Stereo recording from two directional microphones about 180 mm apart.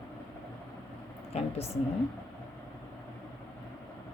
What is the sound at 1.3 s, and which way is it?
Speech, 35° left (ahead or behind).